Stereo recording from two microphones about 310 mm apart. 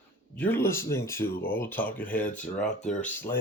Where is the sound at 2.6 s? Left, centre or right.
Left.